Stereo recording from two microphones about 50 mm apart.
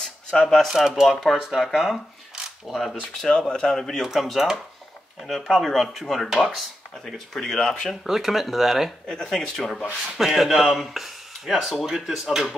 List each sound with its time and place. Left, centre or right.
0.0 s a sound: centre
0.7 s speech: centre
3.3 s speech: centre
4.0 s speech: centre
7.9 s speech: centre
10.1 s speech: centre